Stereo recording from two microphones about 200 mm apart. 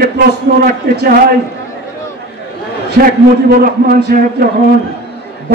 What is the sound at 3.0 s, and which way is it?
A man's voice, 55° right (ahead or behind).